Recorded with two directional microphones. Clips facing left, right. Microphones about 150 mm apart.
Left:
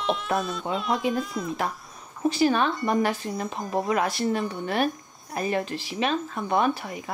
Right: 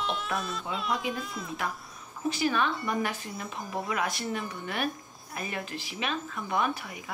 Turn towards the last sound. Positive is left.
turn(degrees=35)  # may be behind; listen again after turning